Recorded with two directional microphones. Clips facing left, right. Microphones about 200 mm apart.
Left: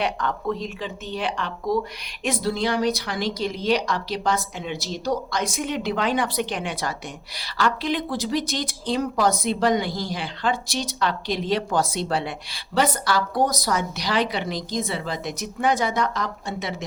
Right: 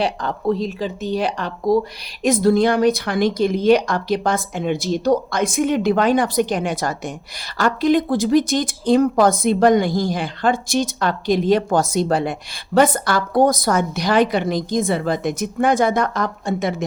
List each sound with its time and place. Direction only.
0.0 s speech: 35° right (ahead or behind); by 16.7 s 50° right (ahead or behind)